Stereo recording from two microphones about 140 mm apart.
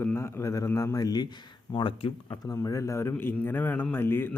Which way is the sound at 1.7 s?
40° left (ahead or behind).